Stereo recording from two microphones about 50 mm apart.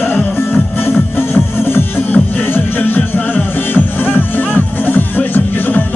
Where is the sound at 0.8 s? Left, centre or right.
Left.